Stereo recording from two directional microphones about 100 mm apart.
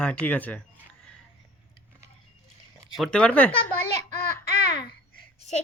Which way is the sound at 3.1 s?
15° left (ahead or behind).